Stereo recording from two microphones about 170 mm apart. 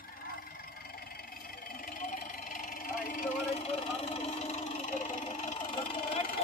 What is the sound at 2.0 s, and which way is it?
Vehicle, 50° left (ahead or behind).